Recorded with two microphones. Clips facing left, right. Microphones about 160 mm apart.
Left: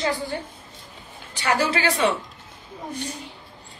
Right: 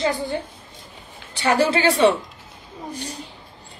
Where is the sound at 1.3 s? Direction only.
30° right (ahead or behind).